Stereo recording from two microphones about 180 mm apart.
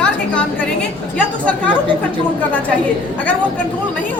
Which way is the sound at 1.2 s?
5° left (ahead or behind).